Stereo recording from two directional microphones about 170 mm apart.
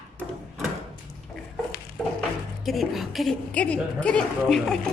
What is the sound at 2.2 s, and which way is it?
A woman's voice, centre (ahead or behind).